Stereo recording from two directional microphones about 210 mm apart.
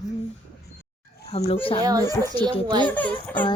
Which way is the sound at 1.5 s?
25° left (ahead or behind).